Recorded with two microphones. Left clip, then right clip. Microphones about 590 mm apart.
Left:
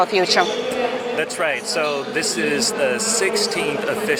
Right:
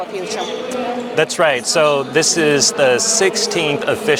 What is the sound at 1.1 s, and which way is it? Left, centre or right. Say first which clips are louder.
A man's voice: right 11 dB; right.